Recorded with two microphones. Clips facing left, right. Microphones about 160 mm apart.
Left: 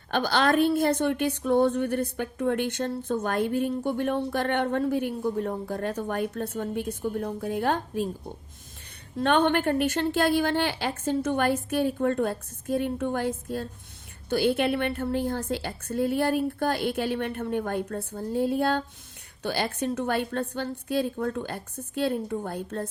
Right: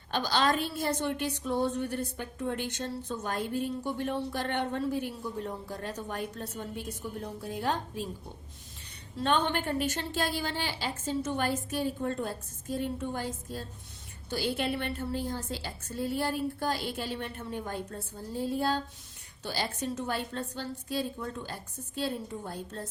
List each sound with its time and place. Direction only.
0.1 s a woman's voice: 55° left (ahead or behind)
9.1 s a woman's voice: 60° left (ahead or behind)